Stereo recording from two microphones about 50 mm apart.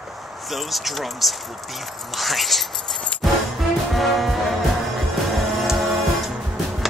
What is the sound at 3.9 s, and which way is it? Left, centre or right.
Music, centre.